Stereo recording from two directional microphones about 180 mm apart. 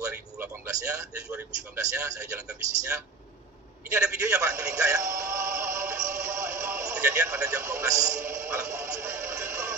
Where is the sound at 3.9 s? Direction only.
10° right (ahead or behind).